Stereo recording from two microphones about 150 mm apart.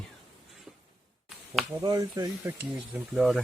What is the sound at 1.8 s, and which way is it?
Speech, 25° right (ahead or behind).